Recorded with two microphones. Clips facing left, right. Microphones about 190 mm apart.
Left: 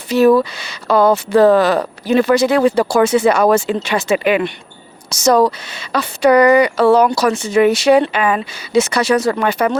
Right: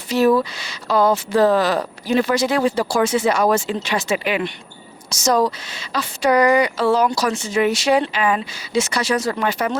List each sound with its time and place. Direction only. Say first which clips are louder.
0.1 s speech: left 5 dB; 60° left (ahead or behind)